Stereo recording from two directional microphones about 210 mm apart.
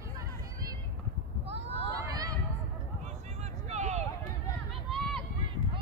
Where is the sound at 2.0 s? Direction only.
20° right (ahead or behind).